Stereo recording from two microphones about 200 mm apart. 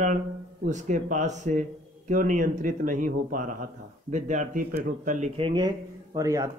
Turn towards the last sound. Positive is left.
turn(degrees=-15)  # may be behind; listen again after turning